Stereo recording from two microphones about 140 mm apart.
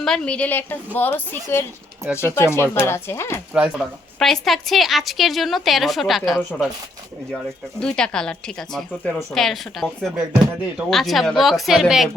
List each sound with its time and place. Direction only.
0.0 s speech: 5° left (ahead or behind)
3.5 s a woman's voice: 5° right (ahead or behind)
7.8 s a woman's voice: 5° left (ahead or behind)